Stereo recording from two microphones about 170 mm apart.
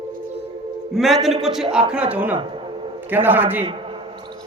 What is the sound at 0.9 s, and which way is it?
A man's voice, centre (ahead or behind).